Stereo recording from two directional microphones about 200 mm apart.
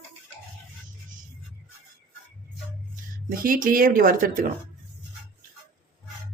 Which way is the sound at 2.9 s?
45° right (ahead or behind).